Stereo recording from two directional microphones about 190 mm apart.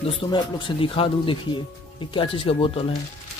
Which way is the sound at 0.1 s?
25° left (ahead or behind).